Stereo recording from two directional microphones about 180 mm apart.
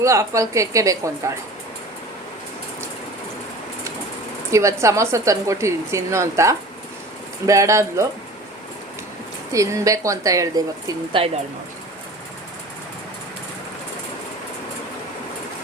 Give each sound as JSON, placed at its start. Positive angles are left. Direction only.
{"t": 0.0, "sound": "a woman's voice", "side_deg": -15}
{"t": 4.5, "sound": "a woman's voice", "side_deg": -15}
{"t": 9.5, "sound": "a woman's voice", "side_deg": -15}